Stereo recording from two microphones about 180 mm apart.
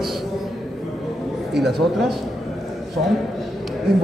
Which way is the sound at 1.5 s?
Centre (ahead or behind).